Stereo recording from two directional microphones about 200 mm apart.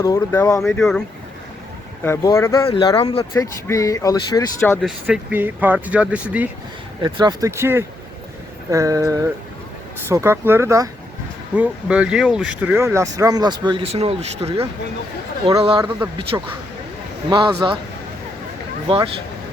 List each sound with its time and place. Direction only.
0.0 s speech: 10° left (ahead or behind)
0.6 s speech: centre (ahead or behind)
2.0 s speech: 15° left (ahead or behind)
3.3 s speech: 15° left (ahead or behind)
4.8 s speech: 5° right (ahead or behind)
7.0 s speech: 20° right (ahead or behind)
16.3 s speech: 15° right (ahead or behind)
18.9 s speech: 25° right (ahead or behind)